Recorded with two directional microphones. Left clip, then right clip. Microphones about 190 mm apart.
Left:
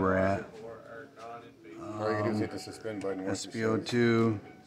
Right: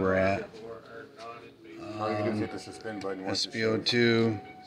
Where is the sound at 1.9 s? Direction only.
25° left (ahead or behind).